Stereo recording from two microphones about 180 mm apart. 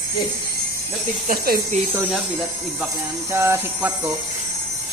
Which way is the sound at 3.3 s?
15° right (ahead or behind).